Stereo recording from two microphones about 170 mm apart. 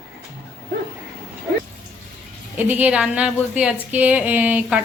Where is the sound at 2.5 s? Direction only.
10° right (ahead or behind).